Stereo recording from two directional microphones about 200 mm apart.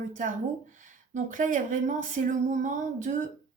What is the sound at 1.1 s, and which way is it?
Speech, 40° right (ahead or behind).